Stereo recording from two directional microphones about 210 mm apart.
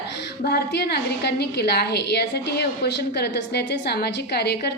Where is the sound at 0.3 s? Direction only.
50° left (ahead or behind).